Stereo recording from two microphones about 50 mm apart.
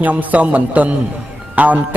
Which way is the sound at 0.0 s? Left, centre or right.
Right.